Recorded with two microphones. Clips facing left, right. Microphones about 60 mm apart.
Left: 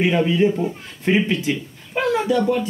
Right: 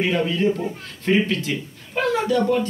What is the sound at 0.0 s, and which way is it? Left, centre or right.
A man's voice, centre.